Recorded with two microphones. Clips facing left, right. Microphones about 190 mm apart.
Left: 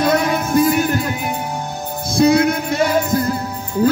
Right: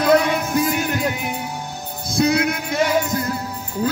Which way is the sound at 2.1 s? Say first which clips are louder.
Left 5 dB; 30° left (ahead or behind).